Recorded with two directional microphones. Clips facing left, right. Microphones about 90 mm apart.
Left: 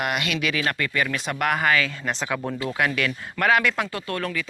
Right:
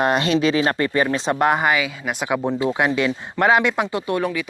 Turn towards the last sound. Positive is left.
turn(degrees=-15)  # may be behind; listen again after turning